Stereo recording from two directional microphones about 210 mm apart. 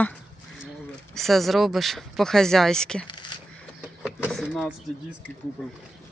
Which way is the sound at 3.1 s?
20° left (ahead or behind).